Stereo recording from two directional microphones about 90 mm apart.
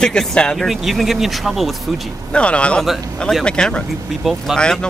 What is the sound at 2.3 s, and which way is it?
Speech, 10° left (ahead or behind).